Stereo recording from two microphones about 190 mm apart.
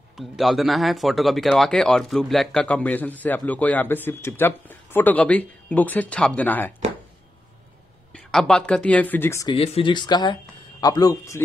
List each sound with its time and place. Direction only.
0.2 s speech: centre (ahead or behind)
8.1 s speech: centre (ahead or behind)
9.5 s speech: 30° left (ahead or behind)